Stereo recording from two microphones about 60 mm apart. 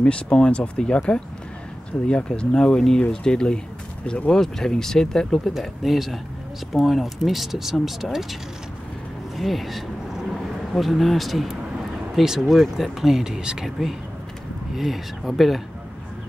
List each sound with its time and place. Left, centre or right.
0.0 s speech: centre
9.4 s speech: centre